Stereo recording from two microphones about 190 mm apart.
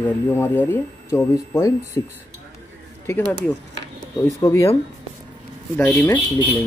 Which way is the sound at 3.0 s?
10° left (ahead or behind).